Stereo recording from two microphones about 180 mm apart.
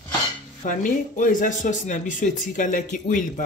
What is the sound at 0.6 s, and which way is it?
Speech, 45° left (ahead or behind).